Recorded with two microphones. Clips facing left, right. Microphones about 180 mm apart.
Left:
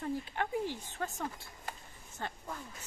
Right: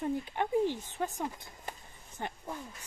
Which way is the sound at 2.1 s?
15° right (ahead or behind).